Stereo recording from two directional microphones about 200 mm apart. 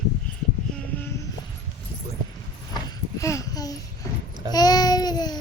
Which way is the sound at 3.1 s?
15° left (ahead or behind).